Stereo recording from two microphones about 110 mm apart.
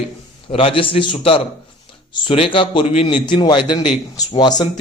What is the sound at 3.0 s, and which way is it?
A man's voice, 50° left (ahead or behind).